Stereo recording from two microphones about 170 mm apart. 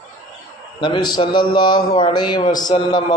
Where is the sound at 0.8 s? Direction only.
30° left (ahead or behind).